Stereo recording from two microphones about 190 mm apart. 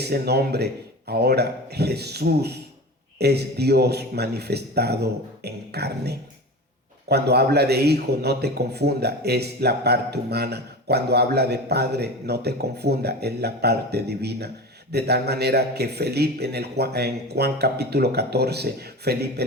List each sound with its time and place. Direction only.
0.0 s a man's voice: 55° right (ahead or behind)